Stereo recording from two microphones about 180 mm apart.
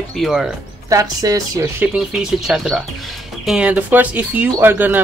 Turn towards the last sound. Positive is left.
turn(degrees=-10)  # may be behind; listen again after turning